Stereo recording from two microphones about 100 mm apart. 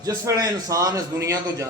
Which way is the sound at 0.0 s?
40° right (ahead or behind).